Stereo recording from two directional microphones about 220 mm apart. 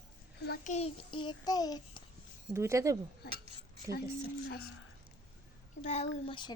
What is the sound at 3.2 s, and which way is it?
Speech, 45° left (ahead or behind).